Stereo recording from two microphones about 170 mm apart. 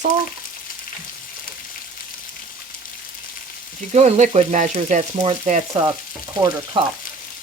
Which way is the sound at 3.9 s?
40° right (ahead or behind).